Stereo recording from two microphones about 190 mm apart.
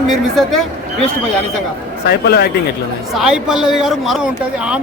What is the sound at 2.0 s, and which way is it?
Speech, 55° left (ahead or behind).